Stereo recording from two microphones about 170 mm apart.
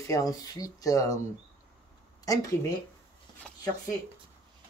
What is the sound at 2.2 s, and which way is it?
Speech, 20° left (ahead or behind).